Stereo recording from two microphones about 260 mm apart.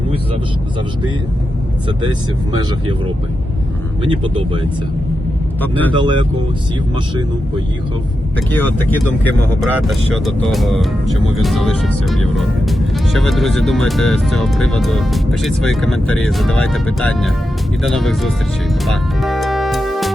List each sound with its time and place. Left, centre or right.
1.9 s speech: centre
4.0 s speech: centre
5.6 s speech: centre
5.9 s speech: centre
8.5 s speech: centre
18.9 s music: centre